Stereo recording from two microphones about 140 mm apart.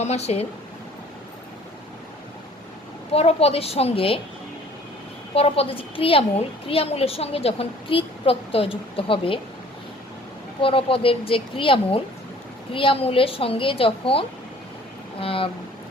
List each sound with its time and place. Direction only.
0.0 s a woman's voice: 50° left (ahead or behind)
3.1 s a woman's voice: 45° left (ahead or behind)
5.3 s a woman's voice: 45° left (ahead or behind)
10.6 s a woman's voice: 40° left (ahead or behind)